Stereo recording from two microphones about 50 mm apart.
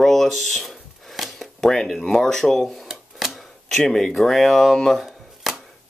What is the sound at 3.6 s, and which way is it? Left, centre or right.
Speech, centre.